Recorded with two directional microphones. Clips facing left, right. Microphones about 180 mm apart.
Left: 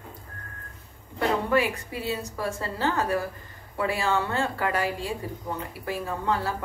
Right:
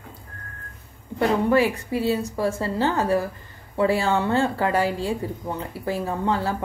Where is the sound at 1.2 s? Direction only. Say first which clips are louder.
Right 5 dB; 30° right (ahead or behind).